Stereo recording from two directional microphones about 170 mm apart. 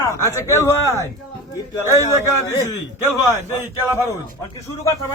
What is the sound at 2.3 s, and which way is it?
Speech, 20° left (ahead or behind).